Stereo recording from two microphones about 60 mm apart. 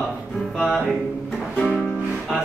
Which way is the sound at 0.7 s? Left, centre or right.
Centre.